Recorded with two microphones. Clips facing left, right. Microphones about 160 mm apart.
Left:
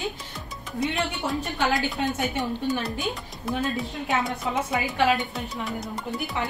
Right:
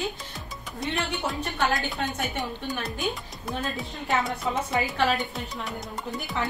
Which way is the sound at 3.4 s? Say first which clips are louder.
Left 4 dB; centre (ahead or behind).